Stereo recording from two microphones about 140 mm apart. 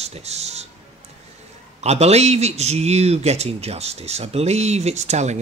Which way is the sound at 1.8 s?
50° right (ahead or behind).